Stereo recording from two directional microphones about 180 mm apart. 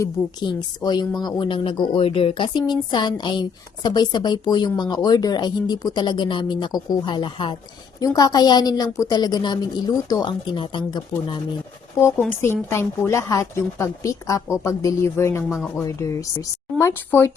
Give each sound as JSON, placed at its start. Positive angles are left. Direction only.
{"t": 0.0, "sound": "speech", "side_deg": 20}
{"t": 11.9, "sound": "a woman's voice", "side_deg": 10}